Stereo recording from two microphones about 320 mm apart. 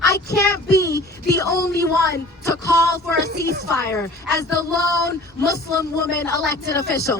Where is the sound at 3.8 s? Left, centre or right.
Centre.